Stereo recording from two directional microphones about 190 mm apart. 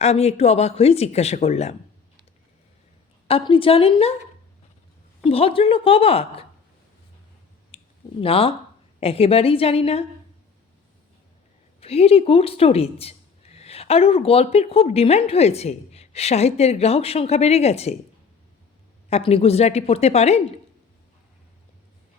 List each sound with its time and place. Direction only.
0.0 s speech: 35° left (ahead or behind)
3.2 s a woman's voice: 30° left (ahead or behind)
5.2 s a woman's voice: 30° left (ahead or behind)
7.7 s clicking: 30° left (ahead or behind)
8.2 s a woman's voice: 30° left (ahead or behind)
11.8 s speech: 30° left (ahead or behind)
19.1 s speech: 30° left (ahead or behind)